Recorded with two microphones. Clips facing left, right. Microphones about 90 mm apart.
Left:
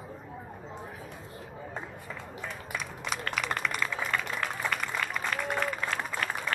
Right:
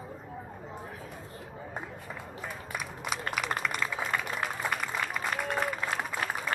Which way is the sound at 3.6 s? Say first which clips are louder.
Even; 5° right (ahead or behind).